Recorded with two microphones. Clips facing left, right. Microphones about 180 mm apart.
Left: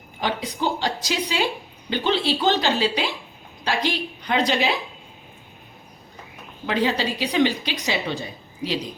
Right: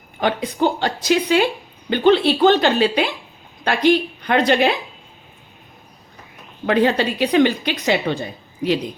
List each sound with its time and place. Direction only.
0.2 s a woman's voice: 55° right (ahead or behind)
6.7 s a woman's voice: 55° right (ahead or behind)